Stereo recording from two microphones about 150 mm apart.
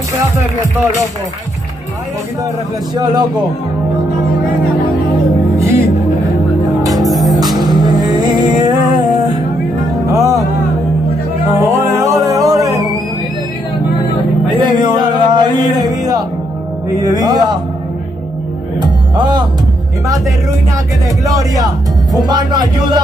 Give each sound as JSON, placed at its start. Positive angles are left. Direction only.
{"t": 3.0, "sound": "speech", "side_deg": -25}
{"t": 7.0, "sound": "music", "side_deg": 0}
{"t": 7.6, "sound": "music", "side_deg": -30}
{"t": 11.6, "sound": "music", "side_deg": -20}
{"t": 14.6, "sound": "music", "side_deg": -30}
{"t": 16.9, "sound": "speech", "side_deg": -25}
{"t": 18.8, "sound": "music", "side_deg": -30}
{"t": 21.2, "sound": "speech", "side_deg": -25}